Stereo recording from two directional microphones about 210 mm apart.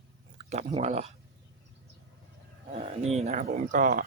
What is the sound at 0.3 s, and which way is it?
Speech, 30° right (ahead or behind).